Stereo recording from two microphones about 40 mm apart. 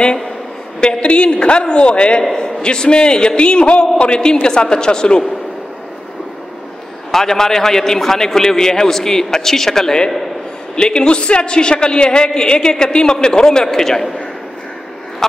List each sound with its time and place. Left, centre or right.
0.7 s a man's voice: left
7.1 s a man's voice: centre